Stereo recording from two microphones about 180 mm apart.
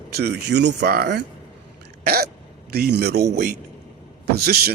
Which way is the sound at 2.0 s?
55° right (ahead or behind).